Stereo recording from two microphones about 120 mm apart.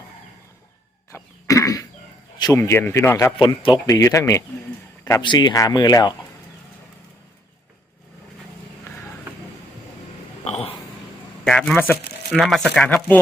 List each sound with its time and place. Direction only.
1.1 s cough: 25° left (ahead or behind)
2.4 s speech: 25° left (ahead or behind)
3.3 s speech: 45° left (ahead or behind)
3.8 s speech: 25° left (ahead or behind)
5.2 s speech: 40° left (ahead or behind)
10.4 s a sound: 60° left (ahead or behind)
11.4 s a man's voice: 5° left (ahead or behind)
11.8 s speech: 15° left (ahead or behind)
12.4 s speech: centre (ahead or behind)